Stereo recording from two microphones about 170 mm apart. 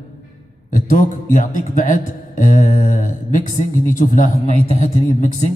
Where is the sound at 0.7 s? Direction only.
50° left (ahead or behind).